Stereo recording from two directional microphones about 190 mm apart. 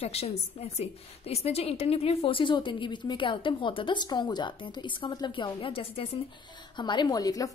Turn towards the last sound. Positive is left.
turn(degrees=20)  # may be behind; listen again after turning